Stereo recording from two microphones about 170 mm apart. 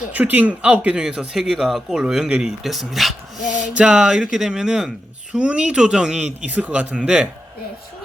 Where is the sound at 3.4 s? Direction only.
45° left (ahead or behind).